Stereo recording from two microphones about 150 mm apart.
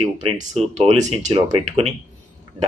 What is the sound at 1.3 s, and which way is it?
Speech, 35° right (ahead or behind).